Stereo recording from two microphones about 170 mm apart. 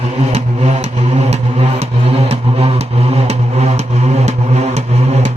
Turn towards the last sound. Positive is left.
turn(degrees=-40)  # may be behind; listen again after turning